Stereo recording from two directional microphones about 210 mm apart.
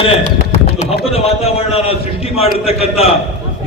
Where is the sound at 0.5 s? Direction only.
30° left (ahead or behind).